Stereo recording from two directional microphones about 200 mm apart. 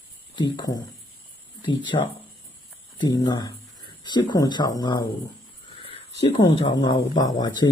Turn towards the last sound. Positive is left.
turn(degrees=20)  # may be behind; listen again after turning